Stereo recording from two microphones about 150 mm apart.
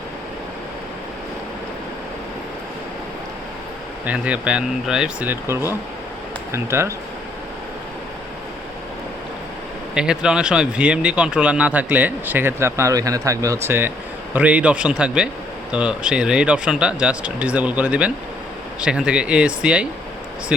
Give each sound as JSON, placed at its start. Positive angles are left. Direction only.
{"t": 4.0, "sound": "speech", "side_deg": -10}
{"t": 9.9, "sound": "speech", "side_deg": -5}